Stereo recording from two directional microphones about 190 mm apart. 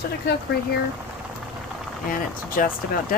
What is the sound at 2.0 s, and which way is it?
Speech, 45° left (ahead or behind).